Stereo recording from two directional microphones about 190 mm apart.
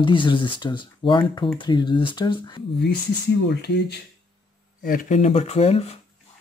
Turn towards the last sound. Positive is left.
turn(degrees=35)  # may be behind; listen again after turning